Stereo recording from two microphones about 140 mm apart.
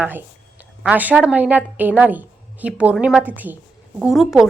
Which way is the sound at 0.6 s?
10° right (ahead or behind).